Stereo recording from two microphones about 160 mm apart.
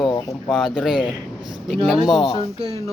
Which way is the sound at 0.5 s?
5° right (ahead or behind).